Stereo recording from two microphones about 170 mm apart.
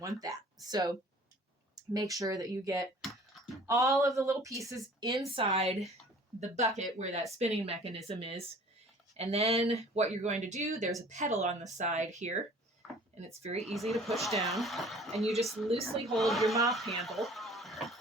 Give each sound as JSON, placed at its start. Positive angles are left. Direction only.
{"t": 0.2, "sound": "speech", "side_deg": -20}
{"t": 1.7, "sound": "a sound", "side_deg": -25}
{"t": 2.1, "sound": "speech", "side_deg": -20}
{"t": 3.0, "sound": "typing", "side_deg": 0}
{"t": 3.7, "sound": "speech", "side_deg": -20}
{"t": 5.3, "sound": "speech", "side_deg": -35}
{"t": 13.7, "sound": "speech", "side_deg": 0}
{"t": 16.6, "sound": "a sound", "side_deg": 0}